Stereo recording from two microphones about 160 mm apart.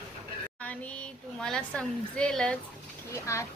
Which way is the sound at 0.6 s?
10° left (ahead or behind).